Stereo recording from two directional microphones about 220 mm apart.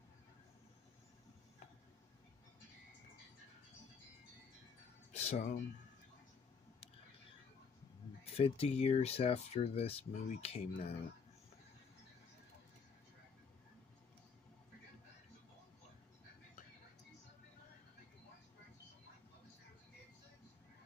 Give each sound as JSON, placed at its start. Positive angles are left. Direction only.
{"t": 5.1, "sound": "speech", "side_deg": 30}
{"t": 8.3, "sound": "speech", "side_deg": 25}